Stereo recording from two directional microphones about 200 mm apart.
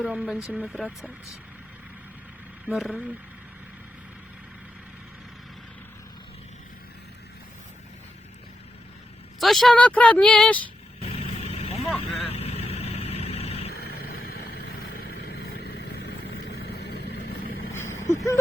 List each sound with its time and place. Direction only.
0.0 s speech: 5° right (ahead or behind)
2.6 s speech: 5° right (ahead or behind)
9.4 s speech: centre (ahead or behind)
11.0 s vehicle: 30° left (ahead or behind)
13.7 s vehicle: 50° left (ahead or behind)
17.7 s vehicle: 15° left (ahead or behind)